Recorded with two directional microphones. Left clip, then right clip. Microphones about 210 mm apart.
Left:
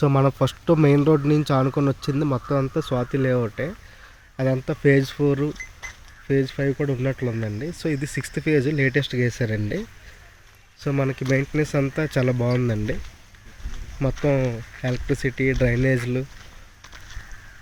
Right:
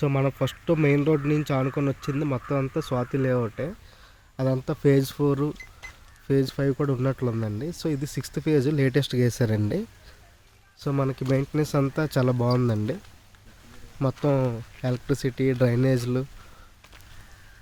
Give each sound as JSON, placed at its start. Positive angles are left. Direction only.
{"t": 0.0, "sound": "speech", "side_deg": 15}
{"t": 10.8, "sound": "speech", "side_deg": -15}
{"t": 14.3, "sound": "speech", "side_deg": -20}